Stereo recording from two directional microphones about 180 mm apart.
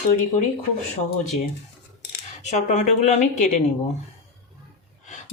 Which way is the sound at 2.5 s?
40° left (ahead or behind).